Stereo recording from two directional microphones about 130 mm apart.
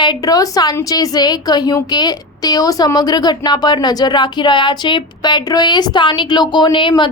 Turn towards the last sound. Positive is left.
turn(degrees=40)  # may be behind; listen again after turning